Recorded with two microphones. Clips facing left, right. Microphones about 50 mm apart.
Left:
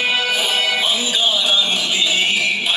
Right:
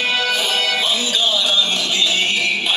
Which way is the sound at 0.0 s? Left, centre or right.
Centre.